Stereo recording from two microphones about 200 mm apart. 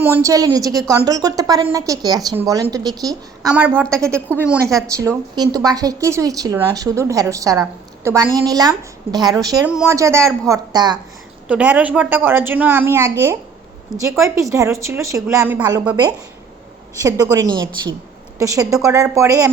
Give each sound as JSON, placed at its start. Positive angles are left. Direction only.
{"t": 0.0, "sound": "a woman's voice", "side_deg": -15}
{"t": 11.4, "sound": "a woman's voice", "side_deg": -5}
{"t": 15.9, "sound": "a woman's voice", "side_deg": -20}